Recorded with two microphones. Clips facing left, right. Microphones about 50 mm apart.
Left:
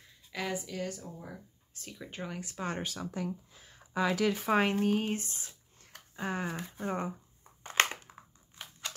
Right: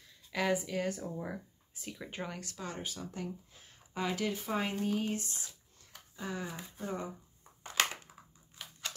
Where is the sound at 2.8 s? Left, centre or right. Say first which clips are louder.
Left 4 dB; left.